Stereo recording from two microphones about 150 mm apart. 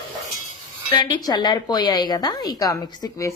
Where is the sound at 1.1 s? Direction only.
30° left (ahead or behind).